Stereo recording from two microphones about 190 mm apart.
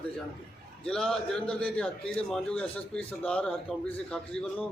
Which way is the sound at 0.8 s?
5° left (ahead or behind).